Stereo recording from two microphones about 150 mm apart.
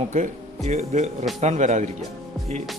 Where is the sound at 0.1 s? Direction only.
50° right (ahead or behind).